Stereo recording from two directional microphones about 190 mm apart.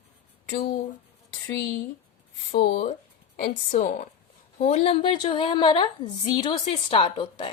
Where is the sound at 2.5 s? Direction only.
30° left (ahead or behind).